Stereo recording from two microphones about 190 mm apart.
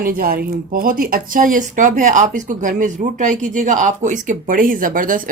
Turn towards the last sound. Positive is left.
turn(degrees=-45)  # may be behind; listen again after turning